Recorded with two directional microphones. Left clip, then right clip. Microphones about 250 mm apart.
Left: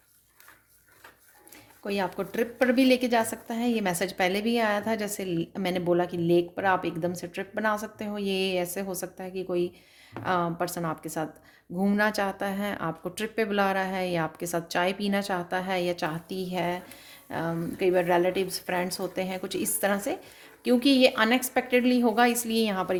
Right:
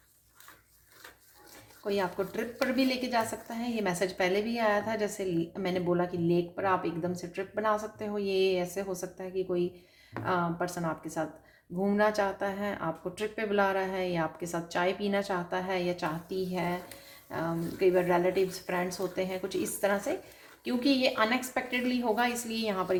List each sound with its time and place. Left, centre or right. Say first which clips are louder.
1.8 s a woman's voice: left 1 dB; left